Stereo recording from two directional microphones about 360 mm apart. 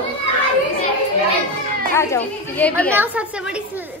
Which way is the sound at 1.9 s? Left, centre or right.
Centre.